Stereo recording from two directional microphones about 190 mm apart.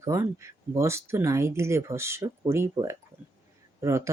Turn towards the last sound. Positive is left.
turn(degrees=-15)  # may be behind; listen again after turning